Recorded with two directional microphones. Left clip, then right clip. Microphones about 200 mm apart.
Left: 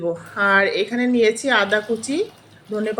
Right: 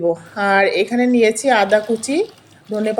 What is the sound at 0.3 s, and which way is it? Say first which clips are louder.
A woman's voice: right 1 dB; 25° right (ahead or behind).